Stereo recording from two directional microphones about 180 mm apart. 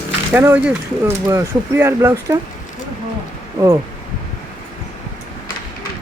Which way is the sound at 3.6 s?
20° right (ahead or behind).